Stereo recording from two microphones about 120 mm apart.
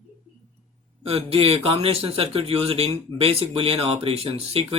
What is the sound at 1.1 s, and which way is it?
Speech, 55° right (ahead or behind).